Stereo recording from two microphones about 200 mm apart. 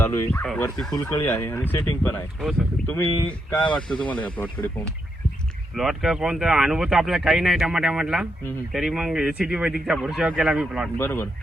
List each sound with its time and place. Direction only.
0.0 s speech: 15° left (ahead or behind)
0.4 s speech: 5° left (ahead or behind)
2.4 s speech: centre (ahead or behind)
3.0 s speech: 25° left (ahead or behind)
3.7 s speech: 5° left (ahead or behind)
5.7 s speech: centre (ahead or behind)
10.9 s speech: 10° left (ahead or behind)